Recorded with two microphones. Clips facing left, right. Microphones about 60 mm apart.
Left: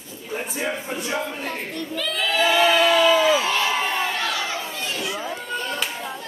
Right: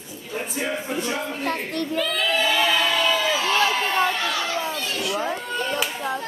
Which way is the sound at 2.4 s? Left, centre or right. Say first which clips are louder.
Left 7 dB; centre.